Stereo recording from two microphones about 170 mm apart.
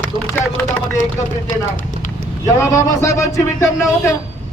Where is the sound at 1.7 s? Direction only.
50° left (ahead or behind).